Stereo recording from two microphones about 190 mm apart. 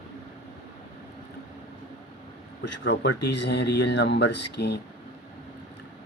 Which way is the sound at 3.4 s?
65° left (ahead or behind).